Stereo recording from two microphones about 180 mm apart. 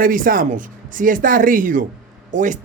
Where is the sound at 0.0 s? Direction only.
50° right (ahead or behind).